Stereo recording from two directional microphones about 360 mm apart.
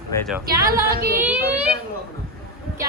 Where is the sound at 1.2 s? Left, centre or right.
Centre.